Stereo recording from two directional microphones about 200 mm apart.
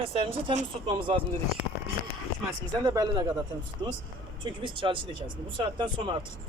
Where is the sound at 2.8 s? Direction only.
20° right (ahead or behind).